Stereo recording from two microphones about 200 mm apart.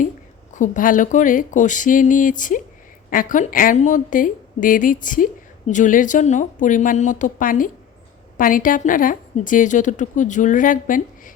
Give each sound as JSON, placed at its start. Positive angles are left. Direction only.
{"t": 0.5, "sound": "a woman's voice", "side_deg": 40}